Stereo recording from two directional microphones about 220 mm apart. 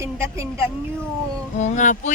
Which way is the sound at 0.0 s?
10° right (ahead or behind).